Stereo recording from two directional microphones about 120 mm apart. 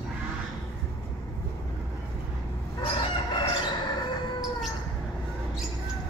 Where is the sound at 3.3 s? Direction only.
40° left (ahead or behind).